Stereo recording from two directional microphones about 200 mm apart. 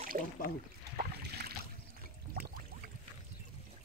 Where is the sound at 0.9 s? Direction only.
50° right (ahead or behind).